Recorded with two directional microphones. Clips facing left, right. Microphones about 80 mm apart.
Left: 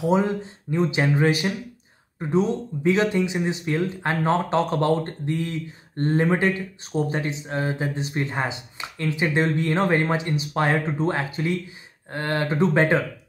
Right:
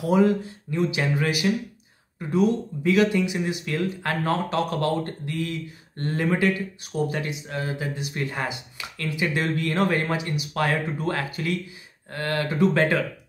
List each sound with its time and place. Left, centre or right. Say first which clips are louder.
0.0 s speech: right 1 dB; left